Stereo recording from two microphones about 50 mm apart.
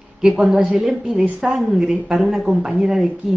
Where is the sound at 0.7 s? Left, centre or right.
Centre.